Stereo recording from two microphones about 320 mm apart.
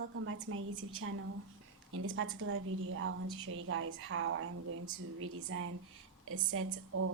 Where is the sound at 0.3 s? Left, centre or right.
Right.